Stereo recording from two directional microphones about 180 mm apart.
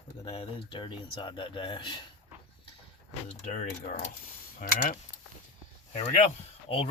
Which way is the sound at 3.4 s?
40° left (ahead or behind).